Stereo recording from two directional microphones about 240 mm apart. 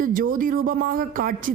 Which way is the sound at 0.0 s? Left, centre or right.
Right.